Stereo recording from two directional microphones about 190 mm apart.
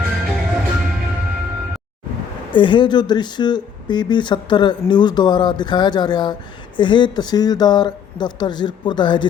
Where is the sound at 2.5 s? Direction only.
25° left (ahead or behind).